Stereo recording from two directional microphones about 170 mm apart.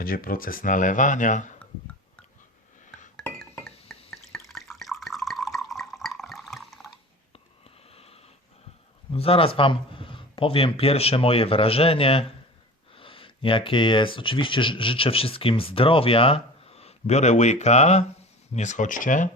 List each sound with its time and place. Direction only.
0.0 s speech: 55° left (ahead or behind)
3.6 s drip: 5° left (ahead or behind)
7.9 s a sound: 35° left (ahead or behind)
9.1 s speech: 35° left (ahead or behind)